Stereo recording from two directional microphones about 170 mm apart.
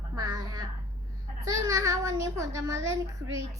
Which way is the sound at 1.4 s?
20° right (ahead or behind).